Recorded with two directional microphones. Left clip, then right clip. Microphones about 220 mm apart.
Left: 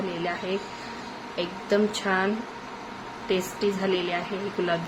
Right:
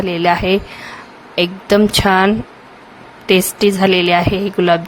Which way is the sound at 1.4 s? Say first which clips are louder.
Right 12 dB; 45° right (ahead or behind).